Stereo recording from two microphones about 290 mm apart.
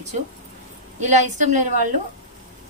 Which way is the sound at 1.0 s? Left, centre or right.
Right.